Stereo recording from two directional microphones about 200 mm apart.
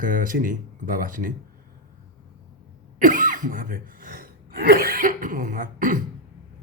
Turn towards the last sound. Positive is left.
turn(degrees=-40)  # may be behind; listen again after turning